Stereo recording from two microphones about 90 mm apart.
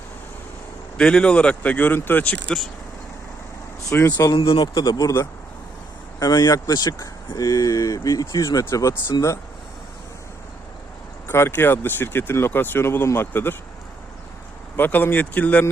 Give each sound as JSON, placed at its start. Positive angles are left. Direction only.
{"t": 0.9, "sound": "speech", "side_deg": 10}
{"t": 3.8, "sound": "speech", "side_deg": 30}
{"t": 4.5, "sound": "speech", "side_deg": 50}
{"t": 6.1, "sound": "speech", "side_deg": 45}
{"t": 11.3, "sound": "speech", "side_deg": 30}
{"t": 14.8, "sound": "speech", "side_deg": 20}